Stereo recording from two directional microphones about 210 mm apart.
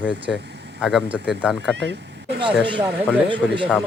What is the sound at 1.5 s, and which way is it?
Speech, 55° right (ahead or behind).